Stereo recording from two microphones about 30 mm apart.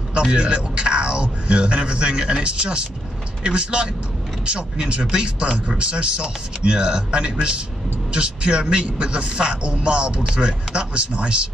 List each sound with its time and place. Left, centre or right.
0.1 s a man's voice: right
5.1 s a man's voice: right